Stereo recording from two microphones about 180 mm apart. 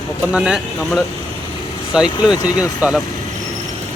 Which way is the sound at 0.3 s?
5° right (ahead or behind).